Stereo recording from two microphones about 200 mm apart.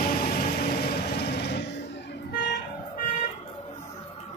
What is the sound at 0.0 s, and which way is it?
Vehicle, 45° left (ahead or behind).